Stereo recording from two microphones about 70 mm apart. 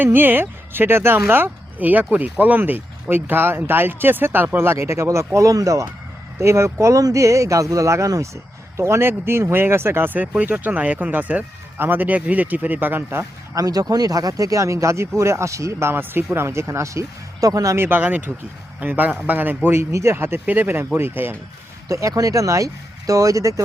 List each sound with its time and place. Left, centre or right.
0.0 s speech: right
13.6 s speech: right
17.7 s speech: right
21.8 s speech: right